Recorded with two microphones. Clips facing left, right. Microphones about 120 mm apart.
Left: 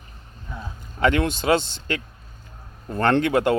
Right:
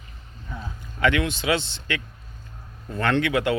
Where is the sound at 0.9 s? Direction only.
40° left (ahead or behind).